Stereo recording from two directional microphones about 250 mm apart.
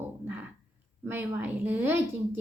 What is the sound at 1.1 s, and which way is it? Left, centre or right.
Speech, centre.